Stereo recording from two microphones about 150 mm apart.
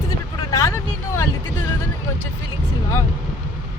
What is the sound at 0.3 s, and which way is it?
Vehicle, 20° left (ahead or behind).